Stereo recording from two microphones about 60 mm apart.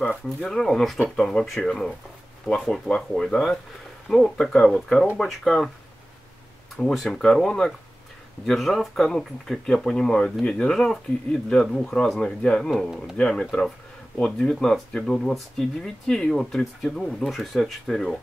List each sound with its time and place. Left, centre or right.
0.4 s speech: centre
6.9 s speech: centre